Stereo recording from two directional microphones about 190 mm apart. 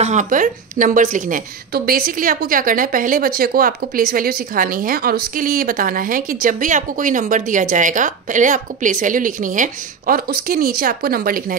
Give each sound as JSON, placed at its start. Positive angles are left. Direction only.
{"t": 0.0, "sound": "a woman's voice", "side_deg": -40}